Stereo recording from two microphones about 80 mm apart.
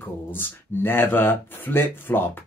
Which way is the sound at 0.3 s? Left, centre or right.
Left.